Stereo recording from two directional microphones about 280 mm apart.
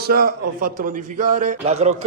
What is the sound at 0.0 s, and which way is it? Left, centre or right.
A man's voice, right.